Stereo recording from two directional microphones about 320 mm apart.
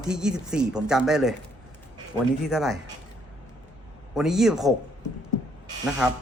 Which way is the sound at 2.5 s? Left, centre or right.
Centre.